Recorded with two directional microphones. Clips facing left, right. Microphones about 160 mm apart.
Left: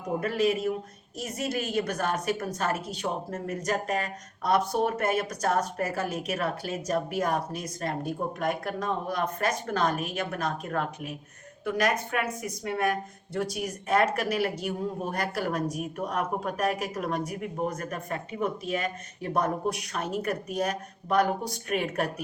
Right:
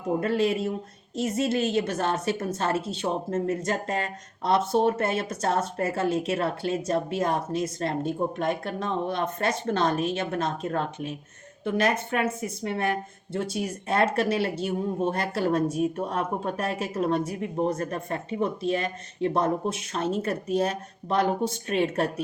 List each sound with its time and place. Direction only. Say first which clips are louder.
0.2 s speech: left 1 dB; 30° right (ahead or behind)